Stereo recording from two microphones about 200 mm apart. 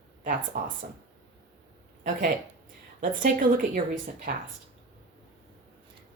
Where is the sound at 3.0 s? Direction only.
40° right (ahead or behind).